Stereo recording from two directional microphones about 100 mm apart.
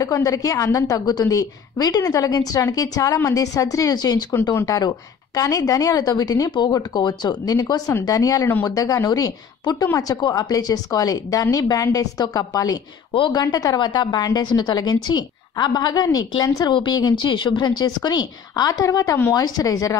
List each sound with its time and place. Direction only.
0.0 s a woman's voice: 35° left (ahead or behind)
19.3 s a woman's voice: 40° left (ahead or behind)